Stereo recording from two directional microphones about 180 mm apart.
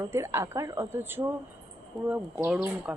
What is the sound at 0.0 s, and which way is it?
Speech, 15° right (ahead or behind).